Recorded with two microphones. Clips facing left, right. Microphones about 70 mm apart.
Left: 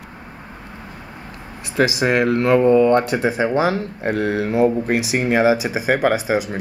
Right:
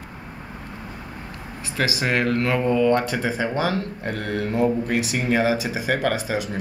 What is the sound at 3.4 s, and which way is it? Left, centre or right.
Speech, centre.